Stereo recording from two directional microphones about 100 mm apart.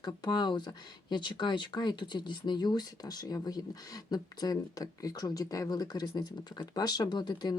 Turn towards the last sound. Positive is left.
turn(degrees=45)  # may be behind; listen again after turning